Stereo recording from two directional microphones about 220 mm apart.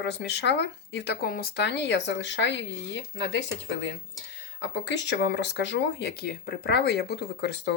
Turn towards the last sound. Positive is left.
turn(degrees=50)  # may be behind; listen again after turning